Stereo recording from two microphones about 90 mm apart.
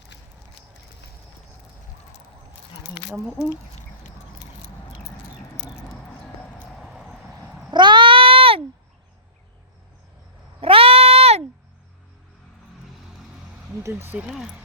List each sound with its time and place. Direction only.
6.7 s vehicle: centre (ahead or behind)
7.7 s a sound: 60° right (ahead or behind); by 8.6 s 90° right
10.6 s cat: 90° right
13.8 s speech: 25° right (ahead or behind)
14.2 s speech: 5° right (ahead or behind)